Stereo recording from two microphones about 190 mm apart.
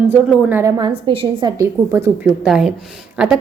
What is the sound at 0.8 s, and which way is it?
A woman's voice, 25° right (ahead or behind).